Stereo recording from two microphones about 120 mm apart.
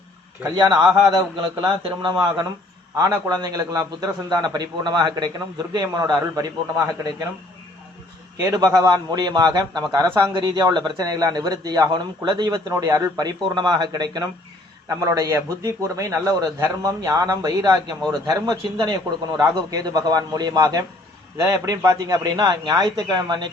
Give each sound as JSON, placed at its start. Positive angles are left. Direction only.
{"t": 0.5, "sound": "speech", "side_deg": -35}
{"t": 2.9, "sound": "speech", "side_deg": -30}
{"t": 8.5, "sound": "a man's voice", "side_deg": -30}